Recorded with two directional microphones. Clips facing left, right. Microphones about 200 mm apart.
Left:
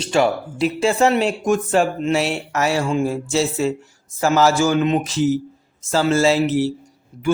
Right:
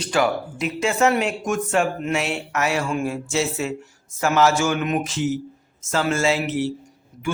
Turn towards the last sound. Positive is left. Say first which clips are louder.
# left 5 dB
turn(degrees=35)  # may be behind; listen again after turning